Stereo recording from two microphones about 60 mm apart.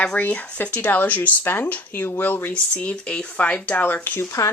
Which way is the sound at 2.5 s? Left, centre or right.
Centre.